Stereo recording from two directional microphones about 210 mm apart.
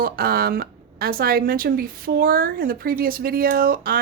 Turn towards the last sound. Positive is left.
turn(degrees=-45)  # may be behind; listen again after turning